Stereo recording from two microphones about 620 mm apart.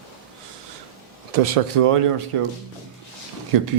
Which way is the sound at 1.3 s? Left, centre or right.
Right.